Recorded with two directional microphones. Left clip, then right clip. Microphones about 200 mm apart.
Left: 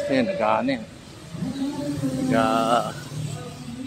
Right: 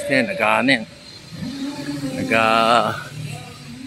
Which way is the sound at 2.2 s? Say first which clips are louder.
Right 6 dB; 20° right (ahead or behind).